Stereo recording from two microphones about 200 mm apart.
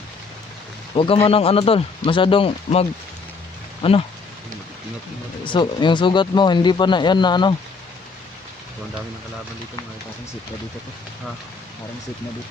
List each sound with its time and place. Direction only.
0.9 s speech: 25° left (ahead or behind)
3.8 s speech: 25° left (ahead or behind)
5.5 s speech: 25° left (ahead or behind)